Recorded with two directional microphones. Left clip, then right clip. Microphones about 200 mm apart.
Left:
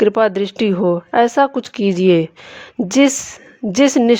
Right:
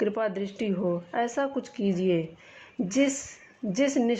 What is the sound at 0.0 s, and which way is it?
Speech, 45° left (ahead or behind).